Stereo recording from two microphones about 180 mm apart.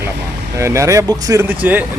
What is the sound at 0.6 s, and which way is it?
Speech, 15° right (ahead or behind).